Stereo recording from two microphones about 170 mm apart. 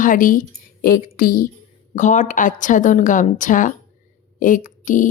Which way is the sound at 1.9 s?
45° left (ahead or behind).